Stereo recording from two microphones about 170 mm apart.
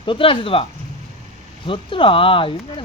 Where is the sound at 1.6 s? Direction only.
30° left (ahead or behind).